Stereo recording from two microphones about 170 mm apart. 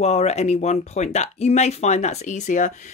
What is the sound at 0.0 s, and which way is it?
Speech, 40° left (ahead or behind).